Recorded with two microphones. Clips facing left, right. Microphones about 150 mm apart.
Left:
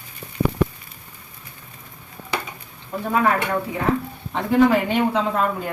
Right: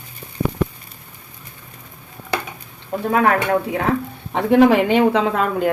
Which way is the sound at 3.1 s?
60° right (ahead or behind).